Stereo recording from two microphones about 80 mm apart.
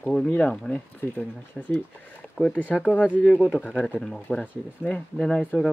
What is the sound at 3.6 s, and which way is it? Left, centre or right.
Speech, centre.